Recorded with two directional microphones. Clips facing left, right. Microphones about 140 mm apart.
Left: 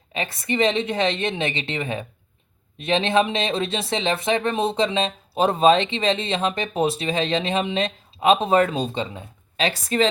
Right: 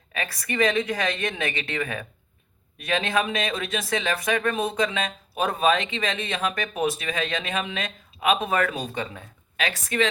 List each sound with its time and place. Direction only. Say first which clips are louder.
0.1 s speech: left 5 dB; 25° left (ahead or behind)